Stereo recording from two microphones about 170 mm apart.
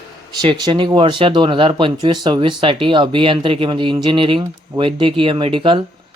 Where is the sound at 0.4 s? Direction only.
30° right (ahead or behind).